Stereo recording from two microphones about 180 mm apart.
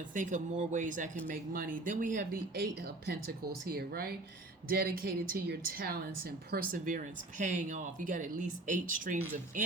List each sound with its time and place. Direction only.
0.1 s a woman's voice: 45° right (ahead or behind)